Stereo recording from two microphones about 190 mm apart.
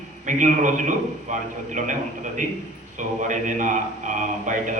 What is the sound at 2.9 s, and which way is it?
A man's voice, 40° right (ahead or behind).